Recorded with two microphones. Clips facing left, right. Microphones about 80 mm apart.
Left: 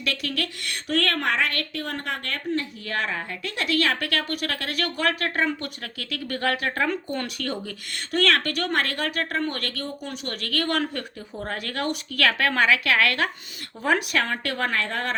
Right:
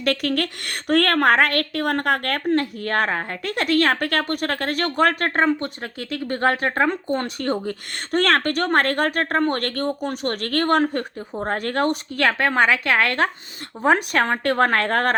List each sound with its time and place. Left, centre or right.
0.0 s a woman's voice: right